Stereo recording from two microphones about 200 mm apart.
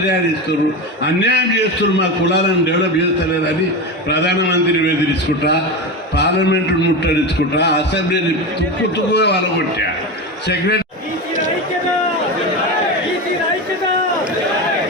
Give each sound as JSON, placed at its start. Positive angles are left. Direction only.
{"t": 1.0, "sound": "a man's voice", "side_deg": 60}
{"t": 4.1, "sound": "a man's voice", "side_deg": 60}
{"t": 6.1, "sound": "a man's voice", "side_deg": 60}